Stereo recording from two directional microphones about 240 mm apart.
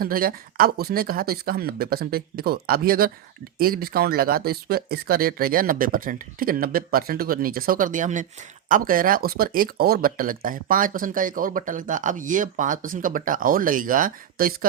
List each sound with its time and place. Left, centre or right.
0.0 s speech: right